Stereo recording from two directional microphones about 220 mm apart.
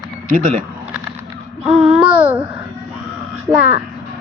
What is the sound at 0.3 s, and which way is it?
Speech, 35° right (ahead or behind).